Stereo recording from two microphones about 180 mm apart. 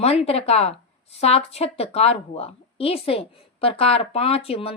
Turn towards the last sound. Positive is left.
turn(degrees=30)  # may be behind; listen again after turning